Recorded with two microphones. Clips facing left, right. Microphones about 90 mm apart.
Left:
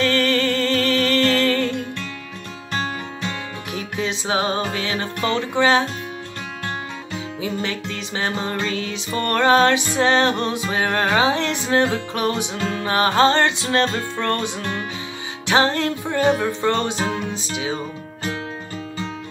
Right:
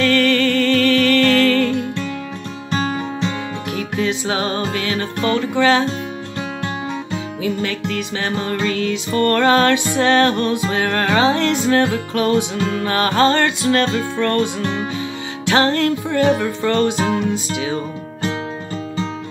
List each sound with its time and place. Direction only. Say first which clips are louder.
0.0 s music: right 4 dB; 25° left (ahead or behind)
3.7 s music: right 4 dB; 20° left (ahead or behind)
7.4 s music: right 4 dB; 20° left (ahead or behind)